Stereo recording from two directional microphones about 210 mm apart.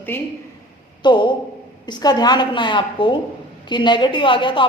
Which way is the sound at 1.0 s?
20° left (ahead or behind).